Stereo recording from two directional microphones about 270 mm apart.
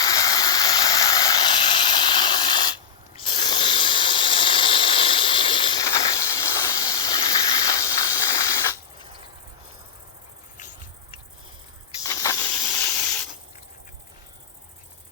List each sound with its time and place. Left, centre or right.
0.0 s steam: centre
3.2 s hiss: centre
12.0 s hiss: centre